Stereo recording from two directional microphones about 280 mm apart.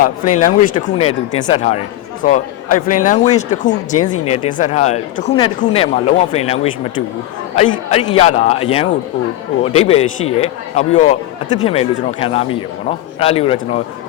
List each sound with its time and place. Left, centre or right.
0.0 s a man's voice: left
3.9 s speech: left
4.5 s a man's voice: left